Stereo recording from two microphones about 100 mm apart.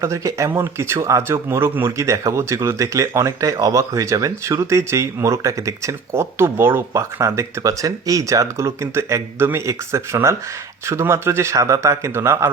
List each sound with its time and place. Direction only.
0.0 s speech: 30° right (ahead or behind)